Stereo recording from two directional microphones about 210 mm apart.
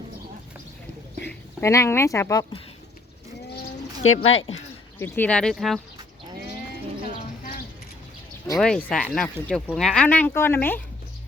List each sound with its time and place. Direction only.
1.3 s speech: 15° left (ahead or behind)
4.0 s speech: 75° left (ahead or behind)
4.9 s speech: 10° left (ahead or behind)
8.5 s speech: 5° left (ahead or behind)